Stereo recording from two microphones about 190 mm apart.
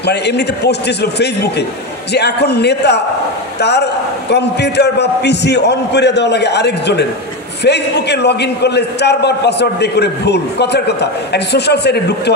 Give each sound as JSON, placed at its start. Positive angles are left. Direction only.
{"t": 0.0, "sound": "a man's voice", "side_deg": 60}